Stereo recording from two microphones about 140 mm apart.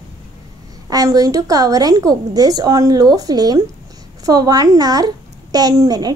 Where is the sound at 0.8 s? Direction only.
25° right (ahead or behind).